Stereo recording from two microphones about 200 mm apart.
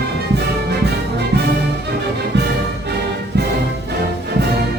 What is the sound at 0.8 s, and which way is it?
Music, 55° right (ahead or behind).